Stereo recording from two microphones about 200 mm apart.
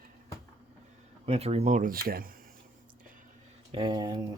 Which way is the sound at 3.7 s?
25° right (ahead or behind).